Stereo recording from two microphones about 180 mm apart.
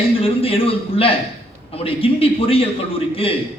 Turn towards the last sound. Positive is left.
turn(degrees=30)  # may be behind; listen again after turning